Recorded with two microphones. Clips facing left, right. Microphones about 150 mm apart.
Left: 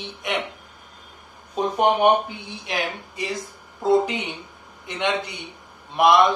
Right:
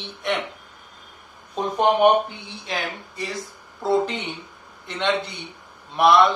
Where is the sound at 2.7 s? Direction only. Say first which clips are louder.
Left 2 dB; 15° left (ahead or behind).